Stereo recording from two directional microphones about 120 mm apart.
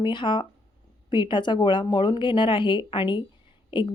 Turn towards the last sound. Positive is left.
turn(degrees=40)  # may be behind; listen again after turning